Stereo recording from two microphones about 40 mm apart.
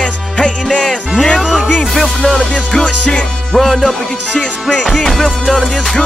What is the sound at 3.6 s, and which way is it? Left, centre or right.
Music, centre.